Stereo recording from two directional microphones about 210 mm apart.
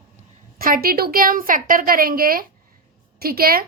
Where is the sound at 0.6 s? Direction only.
45° right (ahead or behind).